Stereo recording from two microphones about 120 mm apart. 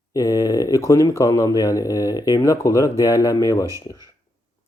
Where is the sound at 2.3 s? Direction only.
25° left (ahead or behind).